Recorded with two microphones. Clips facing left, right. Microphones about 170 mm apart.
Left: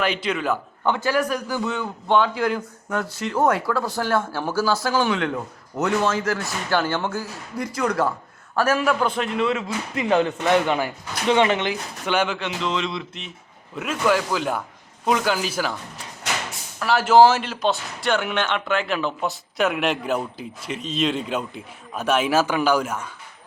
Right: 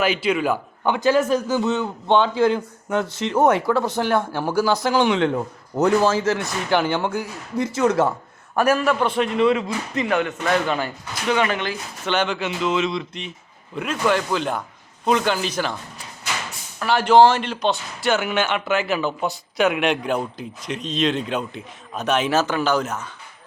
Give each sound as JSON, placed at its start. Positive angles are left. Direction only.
{"t": 0.0, "sound": "a man's voice", "side_deg": -5}
{"t": 8.5, "sound": "a man's voice", "side_deg": -10}
{"t": 8.8, "sound": "speech", "side_deg": 0}
{"t": 10.1, "sound": "speech", "side_deg": 30}
{"t": 10.4, "sound": "speech", "side_deg": 20}
{"t": 12.4, "sound": "speech", "side_deg": -5}
{"t": 16.8, "sound": "speech", "side_deg": 0}